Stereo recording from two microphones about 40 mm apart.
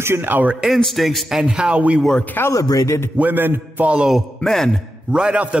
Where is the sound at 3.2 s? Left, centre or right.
Right.